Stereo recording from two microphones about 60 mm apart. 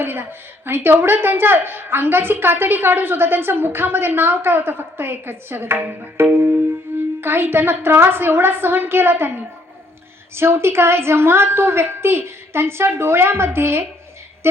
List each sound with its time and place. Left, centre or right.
0.0 s a woman's voice: right